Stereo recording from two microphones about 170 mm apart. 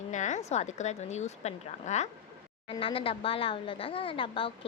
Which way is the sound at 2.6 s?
30° left (ahead or behind).